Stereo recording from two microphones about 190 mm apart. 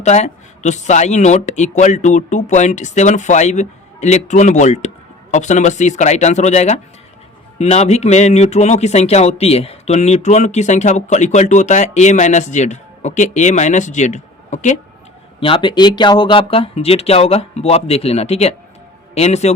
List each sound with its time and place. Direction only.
0.0 s speech: 35° left (ahead or behind)
15.4 s speech: 30° left (ahead or behind)